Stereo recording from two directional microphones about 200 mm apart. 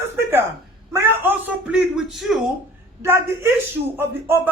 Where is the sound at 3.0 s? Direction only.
10° right (ahead or behind).